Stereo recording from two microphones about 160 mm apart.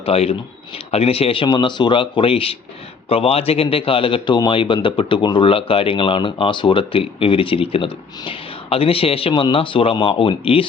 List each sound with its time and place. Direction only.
0.0 s a man's voice: 40° left (ahead or behind)